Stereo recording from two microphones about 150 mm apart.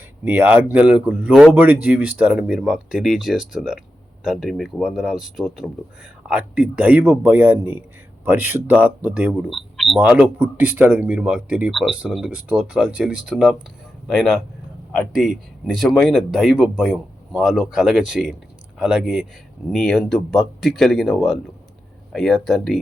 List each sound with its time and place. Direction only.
0.3 s speech: 10° right (ahead or behind)